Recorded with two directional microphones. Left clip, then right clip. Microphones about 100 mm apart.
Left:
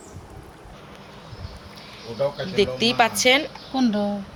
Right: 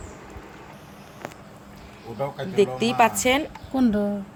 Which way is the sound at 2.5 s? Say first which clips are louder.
Even; 20° right (ahead or behind).